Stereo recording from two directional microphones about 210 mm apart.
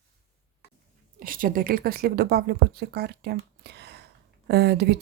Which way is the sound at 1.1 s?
40° right (ahead or behind).